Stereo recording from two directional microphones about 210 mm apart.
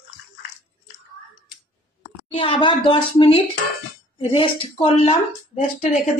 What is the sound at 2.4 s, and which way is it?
Speech, 25° left (ahead or behind).